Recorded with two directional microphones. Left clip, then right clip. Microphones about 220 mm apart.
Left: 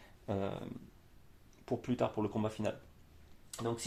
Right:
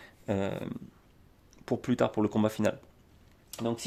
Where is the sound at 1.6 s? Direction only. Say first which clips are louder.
Right 6 dB; 45° right (ahead or behind).